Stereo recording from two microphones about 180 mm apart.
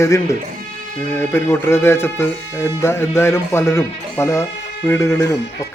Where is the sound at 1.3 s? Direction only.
15° left (ahead or behind).